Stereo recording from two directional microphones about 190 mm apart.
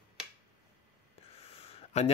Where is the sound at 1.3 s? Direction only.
30° left (ahead or behind).